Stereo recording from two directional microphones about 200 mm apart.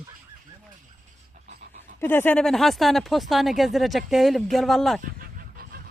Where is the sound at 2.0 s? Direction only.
10° left (ahead or behind).